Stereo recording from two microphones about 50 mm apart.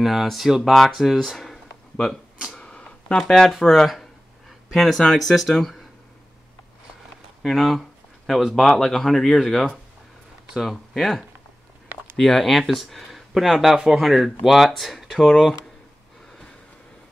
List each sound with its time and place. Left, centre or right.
0.0 s speech: centre
0.9 s a sound: centre
3.3 s speech: centre
3.8 s a sound: centre
5.1 s speech: centre
7.4 s speech: centre